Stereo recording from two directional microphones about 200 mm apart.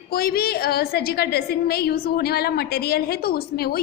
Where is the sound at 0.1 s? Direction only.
50° left (ahead or behind).